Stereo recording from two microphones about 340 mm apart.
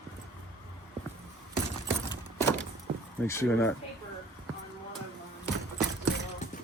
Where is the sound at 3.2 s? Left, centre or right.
Centre.